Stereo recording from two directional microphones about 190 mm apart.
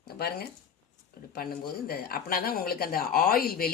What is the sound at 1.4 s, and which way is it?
Speech, 50° left (ahead or behind).